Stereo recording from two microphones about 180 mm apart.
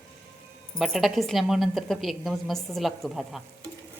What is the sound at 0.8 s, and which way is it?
Speech, centre (ahead or behind).